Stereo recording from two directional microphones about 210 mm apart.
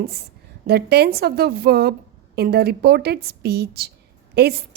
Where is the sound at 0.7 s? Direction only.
50° right (ahead or behind).